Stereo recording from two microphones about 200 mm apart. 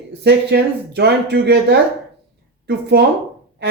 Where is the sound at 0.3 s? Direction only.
55° right (ahead or behind).